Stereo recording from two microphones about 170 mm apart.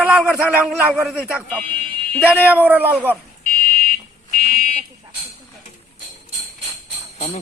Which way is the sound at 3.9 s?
50° left (ahead or behind).